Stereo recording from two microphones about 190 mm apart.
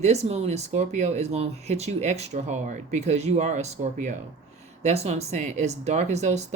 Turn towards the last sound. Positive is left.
turn(degrees=-35)  # may be behind; listen again after turning